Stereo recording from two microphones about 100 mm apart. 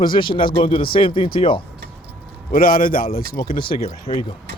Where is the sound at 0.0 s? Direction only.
55° left (ahead or behind).